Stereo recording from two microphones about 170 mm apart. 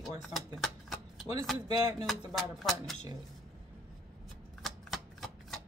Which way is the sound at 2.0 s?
Centre (ahead or behind).